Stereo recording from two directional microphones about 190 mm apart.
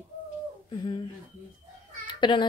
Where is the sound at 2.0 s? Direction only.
25° left (ahead or behind).